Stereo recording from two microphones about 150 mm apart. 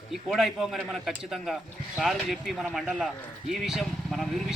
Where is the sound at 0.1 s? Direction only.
Centre (ahead or behind).